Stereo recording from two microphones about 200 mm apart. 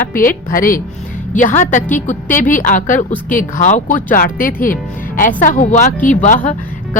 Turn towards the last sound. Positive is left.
turn(degrees=40)  # may be behind; listen again after turning